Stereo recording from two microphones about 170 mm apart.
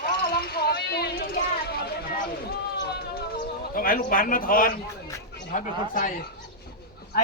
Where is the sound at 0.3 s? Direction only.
65° left (ahead or behind).